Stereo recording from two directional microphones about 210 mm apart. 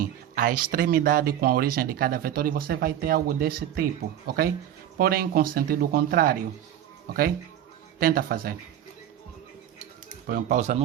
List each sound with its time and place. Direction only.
0.0 s a sound: 40° right (ahead or behind)
0.7 s speech: 45° right (ahead or behind)
7.9 s speech: 45° right (ahead or behind)
10.2 s speech: 40° right (ahead or behind)